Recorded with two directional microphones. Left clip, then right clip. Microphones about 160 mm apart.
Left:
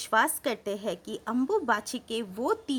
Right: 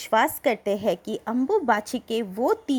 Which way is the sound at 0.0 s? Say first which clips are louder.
Right 4 dB; 20° right (ahead or behind).